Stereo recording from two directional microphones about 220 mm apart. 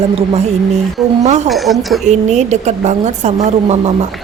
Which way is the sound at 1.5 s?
Centre (ahead or behind).